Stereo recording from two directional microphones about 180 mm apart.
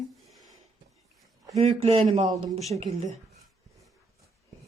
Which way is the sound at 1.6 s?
35° right (ahead or behind).